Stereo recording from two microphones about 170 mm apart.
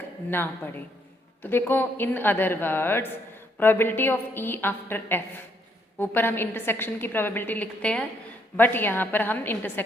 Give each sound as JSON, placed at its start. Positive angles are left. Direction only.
{"t": 0.3, "sound": "a woman's voice", "side_deg": 10}